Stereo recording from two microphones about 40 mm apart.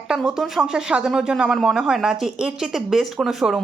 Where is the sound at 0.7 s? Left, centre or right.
Right; by 3.6 s centre.